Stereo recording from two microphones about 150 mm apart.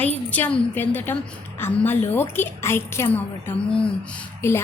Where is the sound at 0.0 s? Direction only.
10° left (ahead or behind).